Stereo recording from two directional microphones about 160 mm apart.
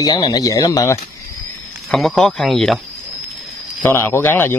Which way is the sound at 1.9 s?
5° left (ahead or behind).